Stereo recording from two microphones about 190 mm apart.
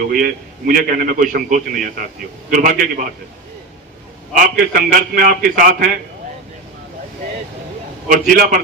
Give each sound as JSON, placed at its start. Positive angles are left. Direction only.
{"t": 0.0, "sound": "a man's voice", "side_deg": -50}
{"t": 4.4, "sound": "a man's voice", "side_deg": -50}
{"t": 8.4, "sound": "a man's voice", "side_deg": -50}